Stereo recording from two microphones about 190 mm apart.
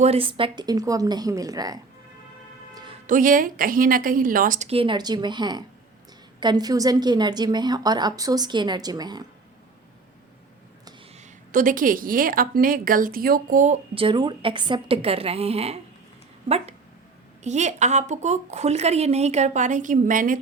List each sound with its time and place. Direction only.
0.0 s a woman's voice: 30° right (ahead or behind)
3.1 s a woman's voice: 45° right (ahead or behind); by 9.2 s 20° right (ahead or behind)
11.2 s a woman's voice: 45° right (ahead or behind)
13.9 s a woman's voice: 25° right (ahead or behind)
17.4 s a woman's voice: 35° right (ahead or behind)